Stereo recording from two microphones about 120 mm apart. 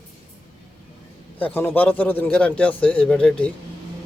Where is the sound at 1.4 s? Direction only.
15° left (ahead or behind).